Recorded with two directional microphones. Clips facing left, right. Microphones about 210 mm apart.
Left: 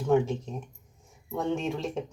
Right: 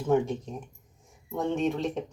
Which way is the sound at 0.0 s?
Centre (ahead or behind).